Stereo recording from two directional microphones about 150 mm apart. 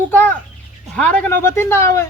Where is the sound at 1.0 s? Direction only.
10° left (ahead or behind).